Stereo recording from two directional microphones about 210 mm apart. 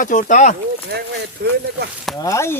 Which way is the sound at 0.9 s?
50° right (ahead or behind).